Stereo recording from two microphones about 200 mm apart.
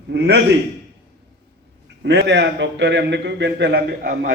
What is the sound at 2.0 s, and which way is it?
A man's voice, 55° right (ahead or behind).